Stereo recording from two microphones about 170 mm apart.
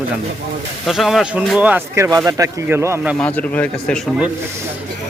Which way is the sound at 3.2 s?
10° left (ahead or behind).